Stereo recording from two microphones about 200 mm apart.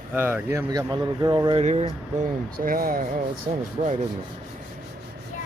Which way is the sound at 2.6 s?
45° right (ahead or behind).